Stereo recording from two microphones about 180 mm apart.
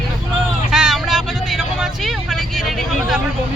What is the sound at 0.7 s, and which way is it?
Speech, 5° right (ahead or behind).